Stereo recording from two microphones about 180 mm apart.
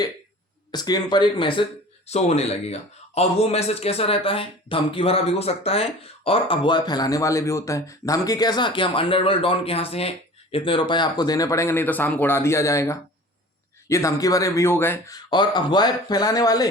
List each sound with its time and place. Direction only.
0.7 s speech: 20° left (ahead or behind)